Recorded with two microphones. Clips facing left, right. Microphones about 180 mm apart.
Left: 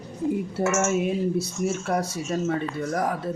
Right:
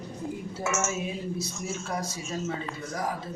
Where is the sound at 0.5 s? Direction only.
60° left (ahead or behind).